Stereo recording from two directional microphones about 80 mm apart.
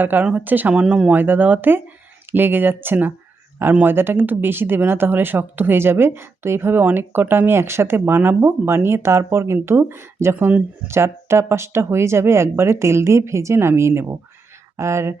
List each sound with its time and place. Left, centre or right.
0.0 s speech: right
0.7 s speech: centre
1.1 s speech: right